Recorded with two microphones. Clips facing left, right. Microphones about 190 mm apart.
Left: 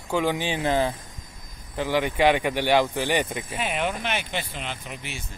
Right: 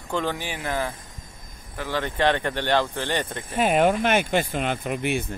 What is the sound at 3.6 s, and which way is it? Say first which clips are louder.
Speech: right 9 dB; 45° right (ahead or behind).